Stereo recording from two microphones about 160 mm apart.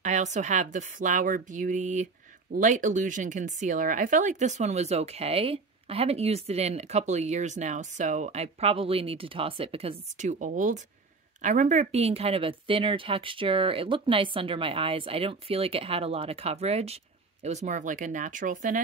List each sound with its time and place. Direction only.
0.0 s speech: 50° right (ahead or behind)